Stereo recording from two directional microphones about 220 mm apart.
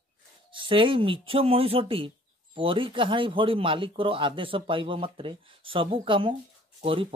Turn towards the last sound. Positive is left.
turn(degrees=-25)  # may be behind; listen again after turning